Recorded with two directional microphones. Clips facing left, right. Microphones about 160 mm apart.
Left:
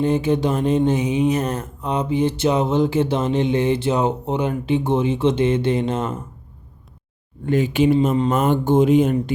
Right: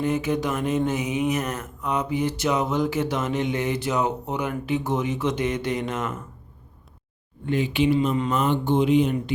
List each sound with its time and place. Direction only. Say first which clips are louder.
0.0 s speech: left 5 dB; 30° left (ahead or behind)
7.4 s speech: left 5 dB; 45° left (ahead or behind)